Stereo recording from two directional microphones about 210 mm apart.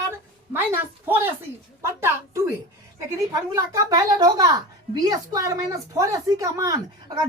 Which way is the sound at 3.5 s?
15° right (ahead or behind).